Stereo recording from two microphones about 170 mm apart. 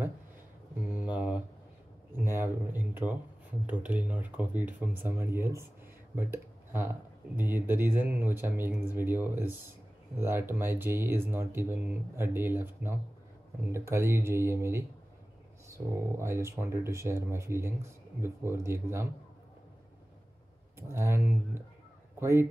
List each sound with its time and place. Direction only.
0.9 s a sound: 10° right (ahead or behind)
2.1 s speech: 15° right (ahead or behind)
16.2 s speech: 15° right (ahead or behind)
20.9 s speech: 15° right (ahead or behind)